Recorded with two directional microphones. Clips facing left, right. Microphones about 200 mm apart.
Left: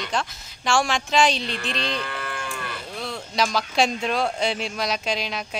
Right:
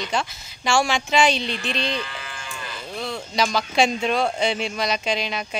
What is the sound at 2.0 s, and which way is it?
Moo, 60° left (ahead or behind).